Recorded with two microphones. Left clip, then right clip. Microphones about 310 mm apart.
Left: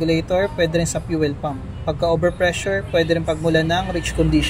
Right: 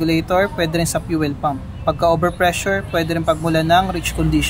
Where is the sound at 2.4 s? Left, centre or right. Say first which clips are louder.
Right 2 dB; centre.